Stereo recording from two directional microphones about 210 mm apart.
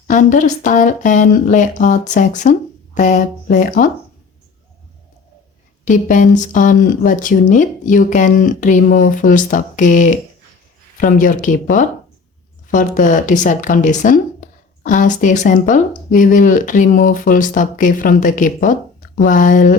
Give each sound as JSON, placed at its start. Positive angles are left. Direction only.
{"t": 0.1, "sound": "speech", "side_deg": 40}
{"t": 5.8, "sound": "speech", "side_deg": 35}